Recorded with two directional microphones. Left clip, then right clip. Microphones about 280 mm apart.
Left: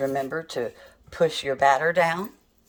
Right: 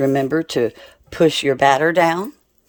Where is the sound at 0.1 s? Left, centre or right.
Right.